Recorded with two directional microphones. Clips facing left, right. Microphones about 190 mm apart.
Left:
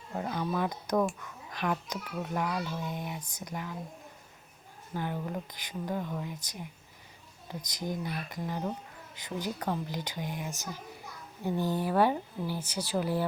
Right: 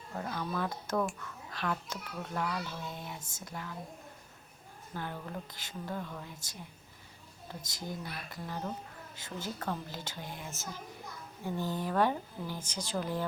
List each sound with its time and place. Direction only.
0.2 s speech: 20° left (ahead or behind)
4.9 s speech: 15° left (ahead or behind)
7.7 s speech: 20° left (ahead or behind)